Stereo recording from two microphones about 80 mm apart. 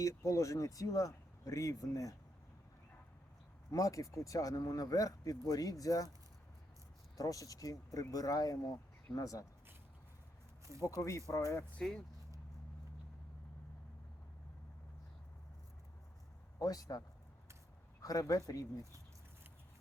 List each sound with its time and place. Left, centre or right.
0.0 s speech: left
3.7 s speech: left
7.2 s speech: left
10.8 s speech: left
11.8 s speech: centre
16.6 s speech: left
18.0 s speech: left